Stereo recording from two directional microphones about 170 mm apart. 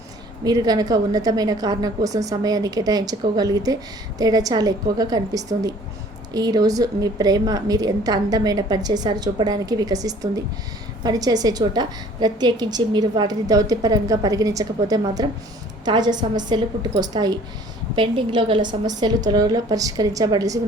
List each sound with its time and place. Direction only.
0.4 s a woman's voice: 25° right (ahead or behind)